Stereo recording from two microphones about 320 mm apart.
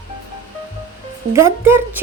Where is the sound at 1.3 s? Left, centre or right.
Centre.